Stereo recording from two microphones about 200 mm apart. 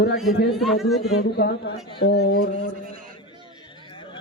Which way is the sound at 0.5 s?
Centre (ahead or behind).